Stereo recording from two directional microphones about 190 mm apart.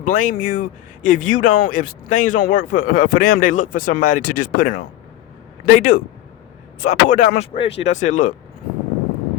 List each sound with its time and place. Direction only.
0.0 s speech: 45° left (ahead or behind)
7.5 s speech: 30° left (ahead or behind)
7.9 s speech: 40° left (ahead or behind)